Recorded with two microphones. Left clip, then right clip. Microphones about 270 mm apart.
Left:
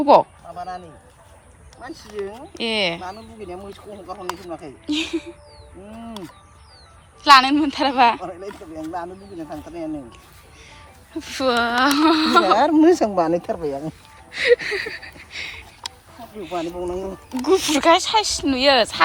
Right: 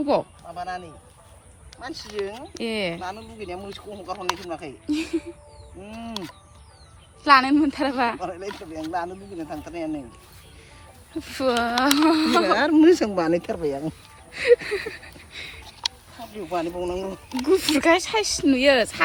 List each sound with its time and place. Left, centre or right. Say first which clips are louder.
0.1 s speech: left 12 dB; centre
1.8 s speech: even; centre
5.8 s speech: right 1 dB; centre
11.2 s speech: left 3 dB; centre
12.5 s a woman's voice: left 2 dB; centre
14.3 s speech: left 1 dB; centre